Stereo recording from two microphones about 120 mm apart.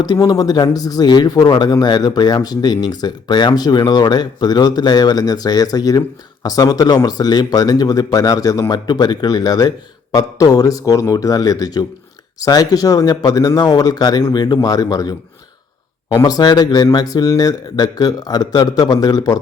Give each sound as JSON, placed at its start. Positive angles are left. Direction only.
{"t": 0.0, "sound": "speech", "side_deg": 30}
{"t": 16.1, "sound": "speech", "side_deg": 35}